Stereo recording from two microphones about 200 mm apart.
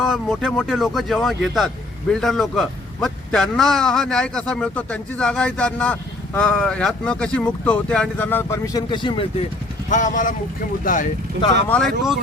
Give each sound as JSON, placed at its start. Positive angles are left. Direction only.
{"t": 0.0, "sound": "a man's voice", "side_deg": 0}
{"t": 9.9, "sound": "speech", "side_deg": 40}
{"t": 11.7, "sound": "a man's voice", "side_deg": 0}